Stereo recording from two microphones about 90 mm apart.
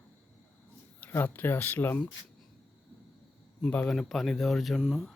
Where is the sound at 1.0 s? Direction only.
20° left (ahead or behind).